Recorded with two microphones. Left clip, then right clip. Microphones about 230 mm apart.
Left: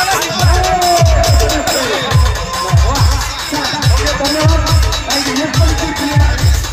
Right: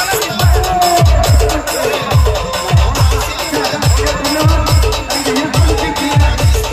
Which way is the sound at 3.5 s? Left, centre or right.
Right.